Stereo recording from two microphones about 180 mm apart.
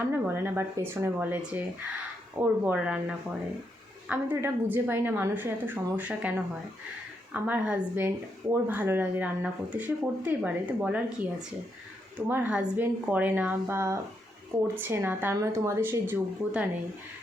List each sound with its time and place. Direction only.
0.1 s speech: 10° right (ahead or behind)